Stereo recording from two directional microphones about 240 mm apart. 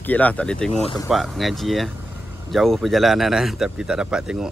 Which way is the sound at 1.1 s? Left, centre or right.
Centre.